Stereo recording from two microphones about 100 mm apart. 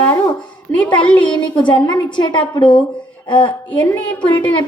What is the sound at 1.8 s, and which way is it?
A woman's voice, 50° left (ahead or behind).